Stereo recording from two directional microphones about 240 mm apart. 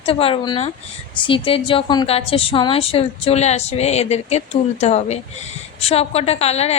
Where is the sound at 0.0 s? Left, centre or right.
Left.